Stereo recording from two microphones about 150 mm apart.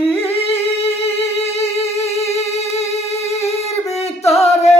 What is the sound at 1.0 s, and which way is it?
Music, 40° left (ahead or behind).